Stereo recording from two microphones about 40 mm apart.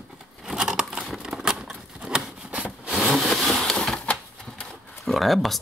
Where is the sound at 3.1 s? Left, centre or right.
Centre.